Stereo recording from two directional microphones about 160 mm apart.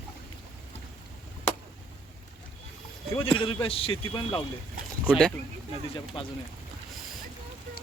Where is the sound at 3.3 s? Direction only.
35° left (ahead or behind).